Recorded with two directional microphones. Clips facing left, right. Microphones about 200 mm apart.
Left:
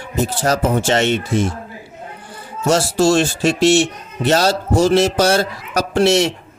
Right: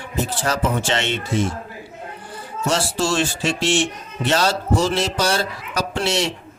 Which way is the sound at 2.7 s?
45° left (ahead or behind).